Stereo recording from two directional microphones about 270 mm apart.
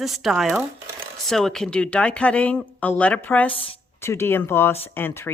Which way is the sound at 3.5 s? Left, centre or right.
Centre.